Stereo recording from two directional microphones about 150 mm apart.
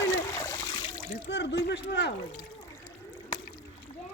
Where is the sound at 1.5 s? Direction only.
90° left.